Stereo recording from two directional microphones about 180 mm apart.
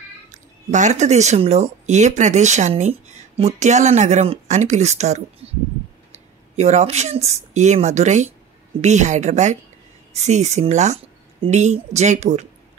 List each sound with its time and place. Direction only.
0.3 s speech: 40° right (ahead or behind)
6.5 s speech: 40° right (ahead or behind)